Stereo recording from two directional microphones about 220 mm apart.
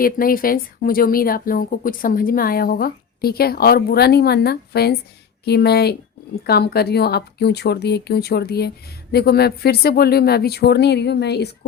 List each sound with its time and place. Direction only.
0.0 s speech: 40° left (ahead or behind)